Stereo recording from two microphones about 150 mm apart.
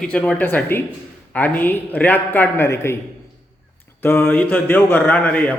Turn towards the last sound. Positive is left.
turn(degrees=10)  # may be behind; listen again after turning